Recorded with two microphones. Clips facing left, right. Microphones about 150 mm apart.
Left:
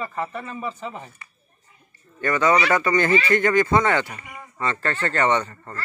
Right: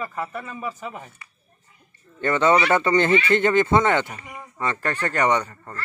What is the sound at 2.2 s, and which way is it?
Speech, 25° right (ahead or behind).